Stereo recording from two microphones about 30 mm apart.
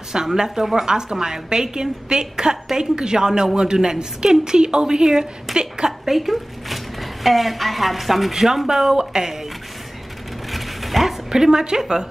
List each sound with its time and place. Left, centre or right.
0.1 s a woman's voice: right
5.0 s a woman's voice: centre
6.0 s a woman's voice: centre
8.6 s a woman's voice: centre
10.5 s mechanisms: centre
11.2 s a woman's voice: centre